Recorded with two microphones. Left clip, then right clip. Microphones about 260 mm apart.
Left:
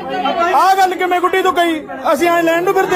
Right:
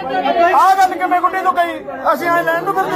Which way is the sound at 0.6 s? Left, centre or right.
Left.